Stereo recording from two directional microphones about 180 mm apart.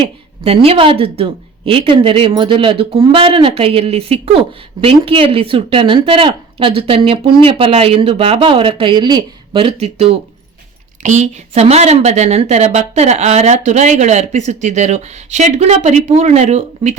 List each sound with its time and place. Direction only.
0.4 s a woman's voice: 35° right (ahead or behind)